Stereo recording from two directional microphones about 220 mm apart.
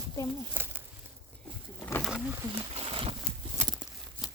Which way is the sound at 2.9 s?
25° right (ahead or behind).